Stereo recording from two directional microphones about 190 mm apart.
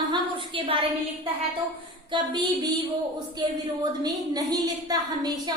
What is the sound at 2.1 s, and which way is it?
Speech, 20° right (ahead or behind).